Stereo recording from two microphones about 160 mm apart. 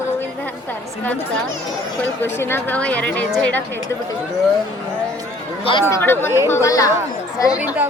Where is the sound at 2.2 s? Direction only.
15° left (ahead or behind).